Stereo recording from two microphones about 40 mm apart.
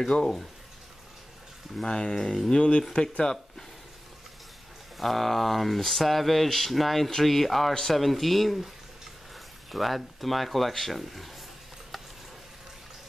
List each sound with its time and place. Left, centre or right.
1.9 s speech: centre
2.5 s speech: left
4.9 s speech: centre
9.7 s speech: centre